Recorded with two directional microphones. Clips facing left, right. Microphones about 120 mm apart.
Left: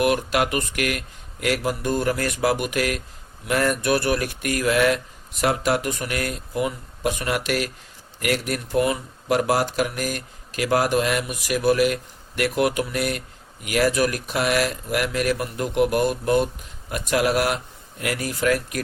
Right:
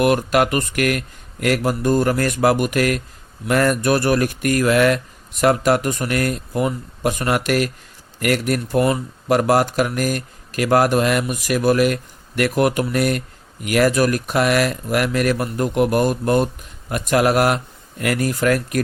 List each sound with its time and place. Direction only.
0.0 s speech: 50° right (ahead or behind)